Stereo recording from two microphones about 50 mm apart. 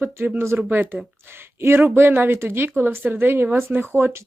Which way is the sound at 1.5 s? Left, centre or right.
Right.